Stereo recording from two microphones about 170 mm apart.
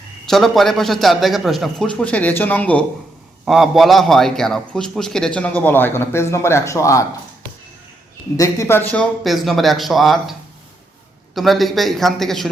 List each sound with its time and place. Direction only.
0.3 s a man's voice: centre (ahead or behind); by 7.0 s 20° left (ahead or behind)
8.4 s a man's voice: 15° left (ahead or behind); by 10.3 s centre (ahead or behind)
11.3 s a man's voice: centre (ahead or behind)